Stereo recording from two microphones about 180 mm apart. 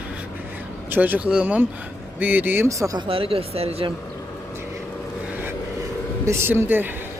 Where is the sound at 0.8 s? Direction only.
10° right (ahead or behind).